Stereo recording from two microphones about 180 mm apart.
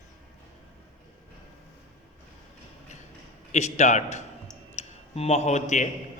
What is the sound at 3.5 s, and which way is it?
A man's voice, 40° left (ahead or behind).